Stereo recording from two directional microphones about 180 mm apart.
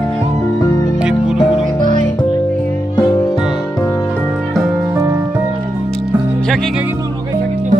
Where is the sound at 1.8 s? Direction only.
45° right (ahead or behind).